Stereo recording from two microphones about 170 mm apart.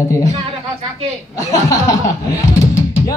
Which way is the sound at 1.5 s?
20° left (ahead or behind).